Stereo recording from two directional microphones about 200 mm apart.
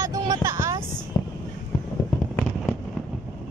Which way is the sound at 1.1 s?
15° left (ahead or behind).